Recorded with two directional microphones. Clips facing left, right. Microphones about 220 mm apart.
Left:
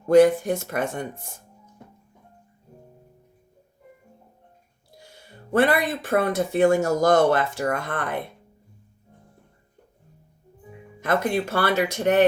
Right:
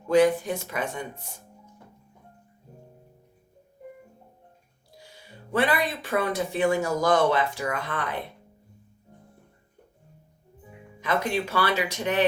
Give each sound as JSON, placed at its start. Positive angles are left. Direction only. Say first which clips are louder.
{"t": 0.1, "sound": "speech", "louder": "left 5 dB", "side_deg": 45}
{"t": 5.0, "sound": "speech", "louder": "left 2 dB", "side_deg": 45}
{"t": 11.0, "sound": "speech", "louder": "left 3 dB", "side_deg": 50}